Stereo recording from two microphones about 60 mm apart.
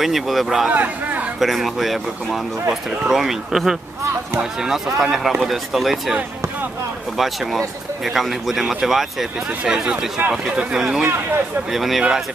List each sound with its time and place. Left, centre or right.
0.0 s speech: centre
0.7 s speech: right
1.4 s speech: centre
7.2 s speech: centre
11.7 s speech: centre